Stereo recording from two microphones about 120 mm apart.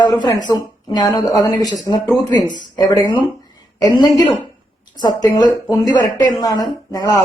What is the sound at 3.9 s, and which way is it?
A woman's voice, 30° left (ahead or behind).